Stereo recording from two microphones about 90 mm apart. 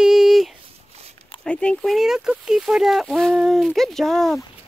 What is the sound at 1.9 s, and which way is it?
Speech, 5° right (ahead or behind).